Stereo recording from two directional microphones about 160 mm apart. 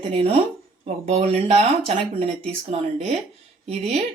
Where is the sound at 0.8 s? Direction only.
40° right (ahead or behind).